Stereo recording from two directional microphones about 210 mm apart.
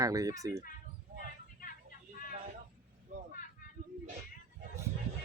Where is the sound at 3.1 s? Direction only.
35° right (ahead or behind).